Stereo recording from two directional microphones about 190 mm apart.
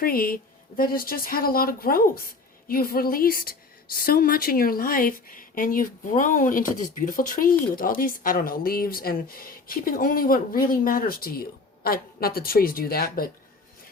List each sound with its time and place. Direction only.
0.0 s speech: 50° left (ahead or behind)